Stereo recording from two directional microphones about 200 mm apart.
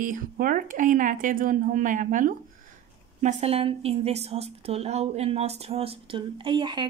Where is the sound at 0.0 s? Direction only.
45° right (ahead or behind).